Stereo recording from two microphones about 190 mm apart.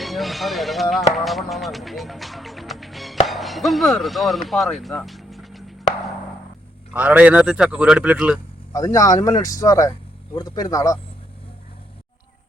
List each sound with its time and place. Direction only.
0.0 s speech: centre (ahead or behind)
6.9 s a man's voice: 10° right (ahead or behind)
8.7 s speech: 20° left (ahead or behind)